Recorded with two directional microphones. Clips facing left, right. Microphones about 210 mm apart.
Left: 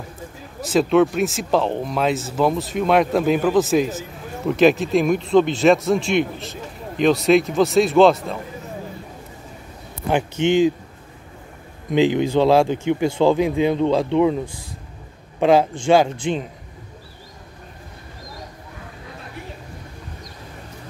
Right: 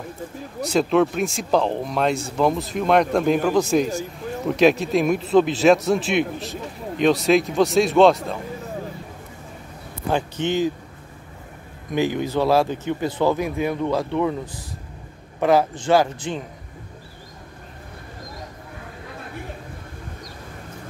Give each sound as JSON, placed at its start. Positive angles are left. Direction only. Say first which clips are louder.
{"t": 0.6, "sound": "speech", "louder": "left 2 dB", "side_deg": 0}
{"t": 10.0, "sound": "speech", "louder": "left 4 dB", "side_deg": 20}
{"t": 11.9, "sound": "speech", "louder": "left 5 dB", "side_deg": 20}
{"t": 15.9, "sound": "speech", "louder": "left 3 dB", "side_deg": 20}